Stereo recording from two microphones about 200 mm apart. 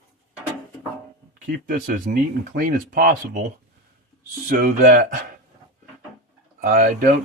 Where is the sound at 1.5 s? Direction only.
45° right (ahead or behind).